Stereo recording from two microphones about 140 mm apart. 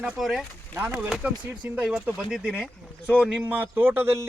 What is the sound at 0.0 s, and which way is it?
Speech, centre (ahead or behind).